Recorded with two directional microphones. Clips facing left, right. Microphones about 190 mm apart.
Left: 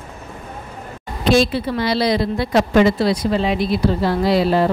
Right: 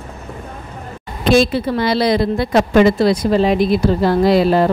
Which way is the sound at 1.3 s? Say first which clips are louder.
Right 3 dB; 50° right (ahead or behind).